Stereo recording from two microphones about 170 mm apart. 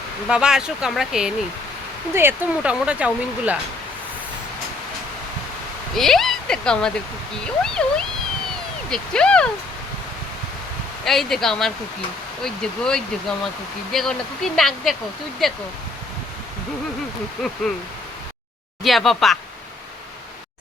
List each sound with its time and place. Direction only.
0.3 s speech: 5° right (ahead or behind)
5.9 s speech: centre (ahead or behind)
11.0 s speech: centre (ahead or behind)
17.6 s speech: centre (ahead or behind)
18.8 s speech: centre (ahead or behind)